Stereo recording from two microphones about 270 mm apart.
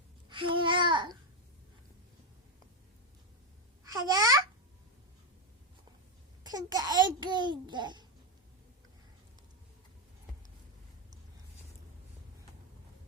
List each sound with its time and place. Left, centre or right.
0.3 s babbling: centre
3.9 s a child's voice: centre
6.4 s babbling: centre